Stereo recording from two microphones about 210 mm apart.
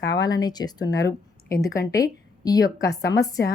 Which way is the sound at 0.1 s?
20° left (ahead or behind).